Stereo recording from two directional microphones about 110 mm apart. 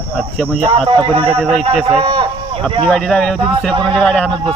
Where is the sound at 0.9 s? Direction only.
50° right (ahead or behind).